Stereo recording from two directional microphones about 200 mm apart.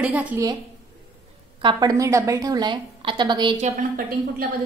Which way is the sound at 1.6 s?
20° right (ahead or behind).